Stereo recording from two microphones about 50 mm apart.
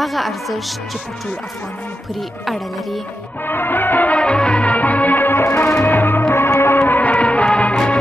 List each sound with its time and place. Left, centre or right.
0.0 s speech: centre
2.4 s speech: centre
3.4 s music: left
4.2 s music: left
5.4 s music: left
5.9 s music: left
6.9 s music: left